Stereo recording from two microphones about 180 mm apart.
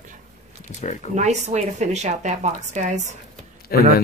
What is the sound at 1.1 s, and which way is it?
A woman's voice, 40° right (ahead or behind).